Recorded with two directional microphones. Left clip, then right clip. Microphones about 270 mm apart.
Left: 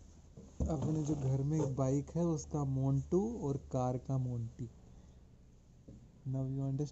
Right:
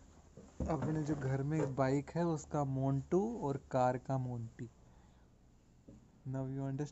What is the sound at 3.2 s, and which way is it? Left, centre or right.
Speech, right.